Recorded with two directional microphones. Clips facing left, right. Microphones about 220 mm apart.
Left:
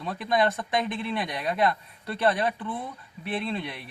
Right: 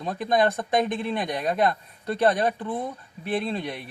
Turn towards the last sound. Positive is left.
turn(degrees=-45)  # may be behind; listen again after turning